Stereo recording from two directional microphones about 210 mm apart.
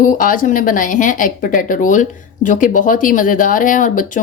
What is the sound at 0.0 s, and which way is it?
A woman's voice, 40° left (ahead or behind).